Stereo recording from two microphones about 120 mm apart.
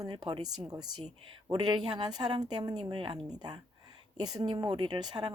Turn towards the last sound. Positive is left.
turn(degrees=-35)  # may be behind; listen again after turning